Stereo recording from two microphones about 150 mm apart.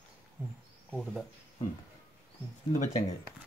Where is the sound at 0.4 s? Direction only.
10° right (ahead or behind).